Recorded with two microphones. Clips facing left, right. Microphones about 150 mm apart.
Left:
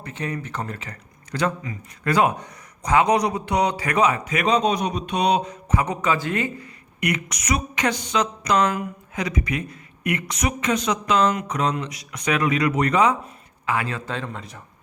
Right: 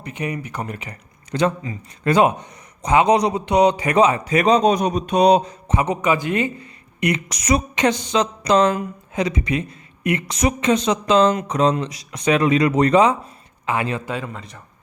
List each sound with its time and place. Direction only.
0.0 s a man's voice: 15° right (ahead or behind); by 5.5 s 40° right (ahead or behind)
5.6 s a man's voice: 20° right (ahead or behind); by 14.6 s centre (ahead or behind)